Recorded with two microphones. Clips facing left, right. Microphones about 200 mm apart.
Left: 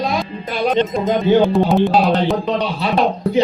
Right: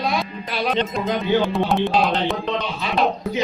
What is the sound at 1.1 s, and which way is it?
Music, 45° left (ahead or behind).